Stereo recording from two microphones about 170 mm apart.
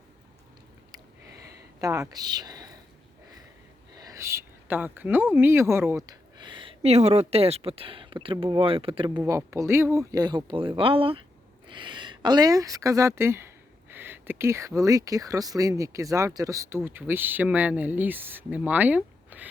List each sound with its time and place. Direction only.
1.8 s speech: 20° right (ahead or behind)
3.9 s speech: 20° right (ahead or behind)
6.1 s speech: 25° right (ahead or behind)
9.0 s speech: 20° right (ahead or behind)